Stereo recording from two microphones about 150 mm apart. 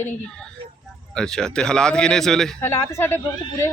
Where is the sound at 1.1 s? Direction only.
5° left (ahead or behind).